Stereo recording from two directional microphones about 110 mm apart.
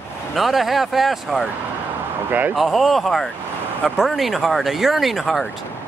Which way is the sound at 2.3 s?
15° right (ahead or behind).